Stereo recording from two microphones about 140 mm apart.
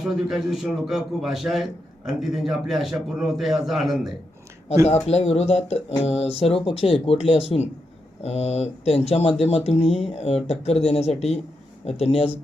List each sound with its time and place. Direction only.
0.0 s a man's voice: centre (ahead or behind)
4.9 s speech: 50° left (ahead or behind)